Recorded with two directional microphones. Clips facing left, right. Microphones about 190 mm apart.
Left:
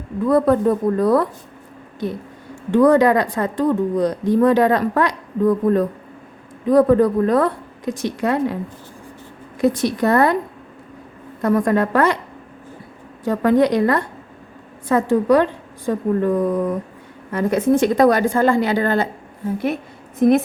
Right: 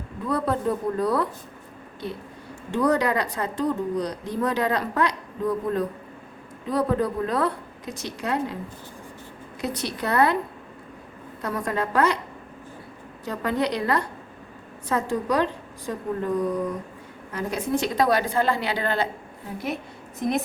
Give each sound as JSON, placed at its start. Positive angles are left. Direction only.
{"t": 0.3, "sound": "speech", "side_deg": 50}
{"t": 2.7, "sound": "speech", "side_deg": 55}
{"t": 9.6, "sound": "speech", "side_deg": 50}
{"t": 11.4, "sound": "a woman's voice", "side_deg": 50}
{"t": 13.2, "sound": "a woman's voice", "side_deg": 50}